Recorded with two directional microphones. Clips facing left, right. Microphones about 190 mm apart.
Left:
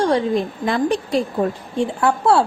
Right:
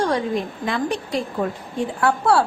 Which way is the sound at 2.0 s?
20° left (ahead or behind).